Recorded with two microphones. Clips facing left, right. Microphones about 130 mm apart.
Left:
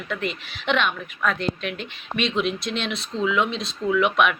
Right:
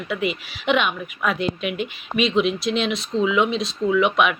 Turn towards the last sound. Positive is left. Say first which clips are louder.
# right 1 dB
turn(degrees=0)  # may be behind; listen again after turning